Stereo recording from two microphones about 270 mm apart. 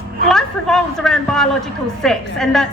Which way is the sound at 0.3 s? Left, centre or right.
Centre.